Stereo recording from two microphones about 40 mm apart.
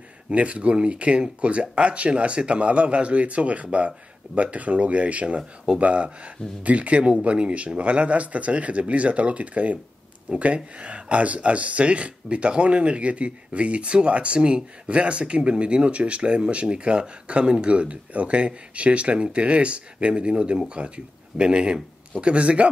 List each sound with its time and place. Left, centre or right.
0.3 s speech: right